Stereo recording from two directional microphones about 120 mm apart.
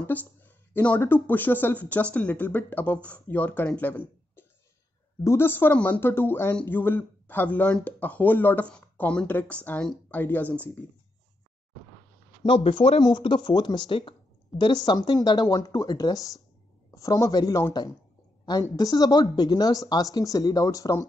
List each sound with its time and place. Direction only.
0.0 s speech: 15° left (ahead or behind)
5.2 s speech: 20° left (ahead or behind)
12.4 s speech: 50° left (ahead or behind)
13.0 s speech: 40° left (ahead or behind)